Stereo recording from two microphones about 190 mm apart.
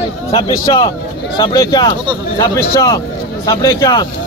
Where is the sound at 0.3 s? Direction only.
25° left (ahead or behind).